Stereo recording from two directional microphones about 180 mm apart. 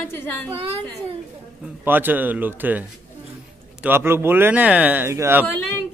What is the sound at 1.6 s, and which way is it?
A man's voice, 10° right (ahead or behind).